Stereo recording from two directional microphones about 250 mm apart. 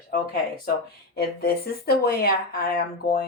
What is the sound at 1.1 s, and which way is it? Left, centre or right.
Speech, left.